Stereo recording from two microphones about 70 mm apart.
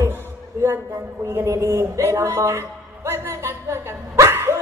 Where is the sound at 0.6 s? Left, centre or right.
Right.